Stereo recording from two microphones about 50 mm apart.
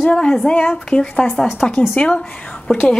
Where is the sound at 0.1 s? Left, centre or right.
Centre.